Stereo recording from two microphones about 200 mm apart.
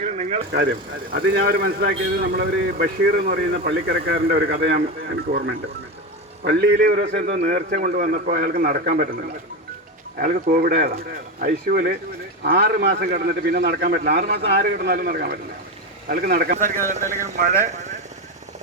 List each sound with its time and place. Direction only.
0.0 s vehicle: 30° right (ahead or behind)
1.1 s a man's voice: 55° right (ahead or behind)
10.2 s a man's voice: 45° right (ahead or behind)